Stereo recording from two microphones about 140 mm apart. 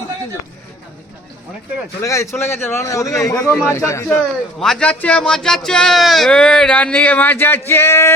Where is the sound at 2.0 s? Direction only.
20° left (ahead or behind).